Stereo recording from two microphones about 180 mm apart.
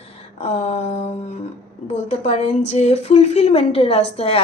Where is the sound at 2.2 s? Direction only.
35° left (ahead or behind).